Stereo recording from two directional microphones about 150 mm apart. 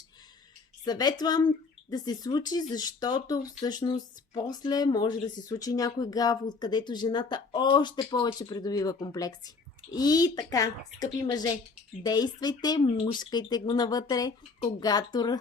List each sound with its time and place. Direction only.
0.9 s speech: 25° left (ahead or behind)